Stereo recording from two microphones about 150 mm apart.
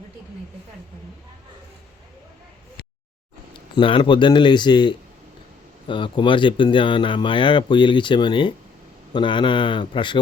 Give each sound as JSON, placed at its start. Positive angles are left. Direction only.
{"t": 3.8, "sound": "speech", "side_deg": 35}